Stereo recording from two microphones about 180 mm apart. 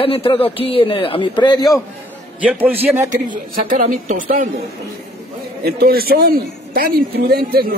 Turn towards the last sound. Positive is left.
turn(degrees=-60)  # may be behind; listen again after turning